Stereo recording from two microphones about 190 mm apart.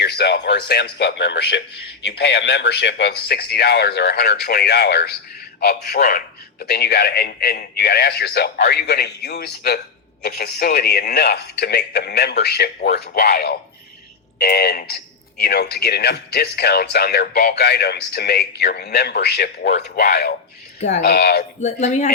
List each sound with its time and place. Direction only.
0.0 s speech: 60° left (ahead or behind)
21.6 s speech: 40° left (ahead or behind)